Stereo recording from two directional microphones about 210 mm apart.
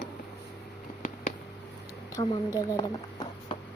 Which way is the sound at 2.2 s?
15° left (ahead or behind).